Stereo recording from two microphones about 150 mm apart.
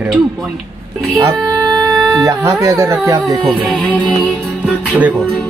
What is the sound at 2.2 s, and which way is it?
Speech, 20° right (ahead or behind).